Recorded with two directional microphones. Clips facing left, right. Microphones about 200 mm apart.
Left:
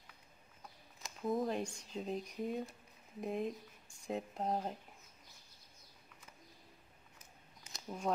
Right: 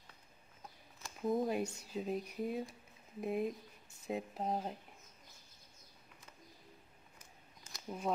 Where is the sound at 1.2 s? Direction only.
5° right (ahead or behind).